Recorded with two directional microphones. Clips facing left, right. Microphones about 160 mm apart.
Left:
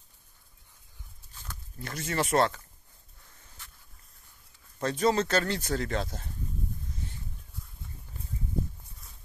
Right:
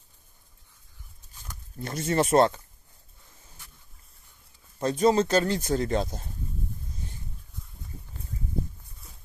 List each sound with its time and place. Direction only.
1.8 s speech: 25° right (ahead or behind)
4.7 s speech: 15° right (ahead or behind)